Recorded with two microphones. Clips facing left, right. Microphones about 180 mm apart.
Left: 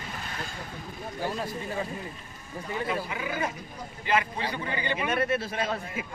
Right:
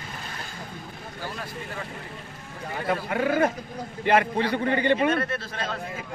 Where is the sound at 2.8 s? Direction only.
60° right (ahead or behind).